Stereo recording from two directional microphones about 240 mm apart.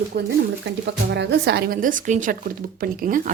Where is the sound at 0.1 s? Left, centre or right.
Right.